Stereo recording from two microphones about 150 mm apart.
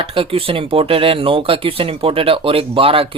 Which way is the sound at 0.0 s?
35° right (ahead or behind).